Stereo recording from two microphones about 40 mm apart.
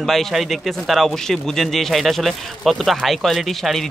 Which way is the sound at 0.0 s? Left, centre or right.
Centre.